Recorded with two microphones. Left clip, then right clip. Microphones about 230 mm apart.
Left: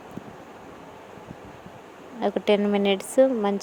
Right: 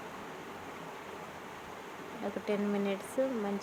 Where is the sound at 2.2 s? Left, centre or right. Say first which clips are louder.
Left 13 dB; left.